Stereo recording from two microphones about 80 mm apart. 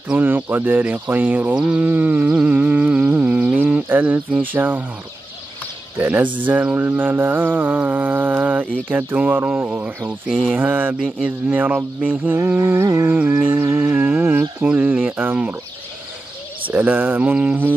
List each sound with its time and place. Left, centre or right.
0.1 s mantra: right
1.9 s music: right
5.9 s mantra: right
12.4 s music: right
13.2 s mantra: centre
13.6 s mantra: right
16.6 s mantra: centre